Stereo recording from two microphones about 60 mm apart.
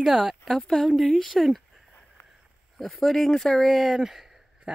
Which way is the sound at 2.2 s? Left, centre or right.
Left.